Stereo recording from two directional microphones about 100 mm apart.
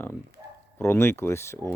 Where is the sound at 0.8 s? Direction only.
25° left (ahead or behind).